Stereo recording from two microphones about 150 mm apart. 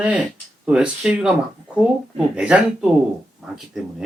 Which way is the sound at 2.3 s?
5° right (ahead or behind).